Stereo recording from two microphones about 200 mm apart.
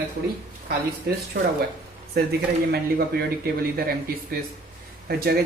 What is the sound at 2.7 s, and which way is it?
Speech, 50° right (ahead or behind).